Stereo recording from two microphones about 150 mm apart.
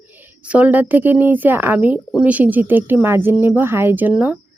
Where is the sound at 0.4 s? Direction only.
10° right (ahead or behind).